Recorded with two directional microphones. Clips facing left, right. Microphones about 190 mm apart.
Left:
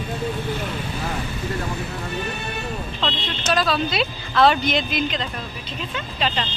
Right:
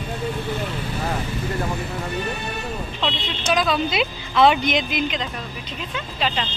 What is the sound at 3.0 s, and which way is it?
Speech, 15° right (ahead or behind).